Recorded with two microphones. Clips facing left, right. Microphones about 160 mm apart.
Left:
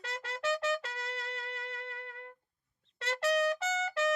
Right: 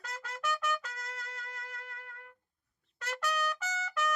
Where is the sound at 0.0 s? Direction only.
30° left (ahead or behind).